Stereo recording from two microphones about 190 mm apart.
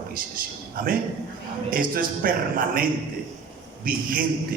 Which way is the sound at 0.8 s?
45° right (ahead or behind).